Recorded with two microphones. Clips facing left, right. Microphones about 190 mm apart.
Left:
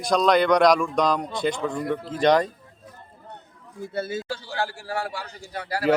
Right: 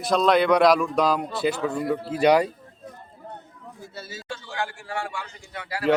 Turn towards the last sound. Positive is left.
turn(degrees=40)  # may be behind; listen again after turning